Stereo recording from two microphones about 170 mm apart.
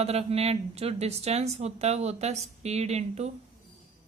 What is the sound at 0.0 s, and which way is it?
Speech, 35° right (ahead or behind).